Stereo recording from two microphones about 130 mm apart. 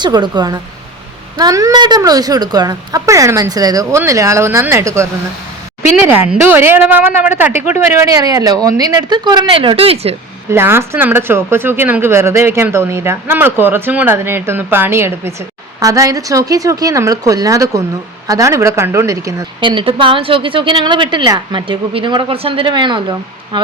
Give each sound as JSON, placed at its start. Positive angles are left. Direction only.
{"t": 0.0, "sound": "a woman's voice", "side_deg": -35}
{"t": 6.1, "sound": "a woman's voice", "side_deg": -10}
{"t": 10.5, "sound": "speech", "side_deg": -20}
{"t": 19.5, "sound": "a woman's voice", "side_deg": -40}